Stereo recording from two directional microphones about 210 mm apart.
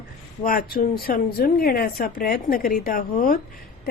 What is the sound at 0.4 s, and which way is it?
A woman's voice, 45° left (ahead or behind).